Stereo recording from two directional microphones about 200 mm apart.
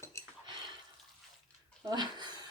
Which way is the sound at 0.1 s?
15° left (ahead or behind).